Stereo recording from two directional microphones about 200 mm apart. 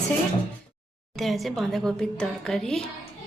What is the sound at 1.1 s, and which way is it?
Speech, centre (ahead or behind).